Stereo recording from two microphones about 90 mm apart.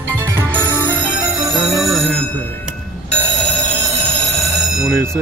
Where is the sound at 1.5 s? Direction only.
Centre (ahead or behind).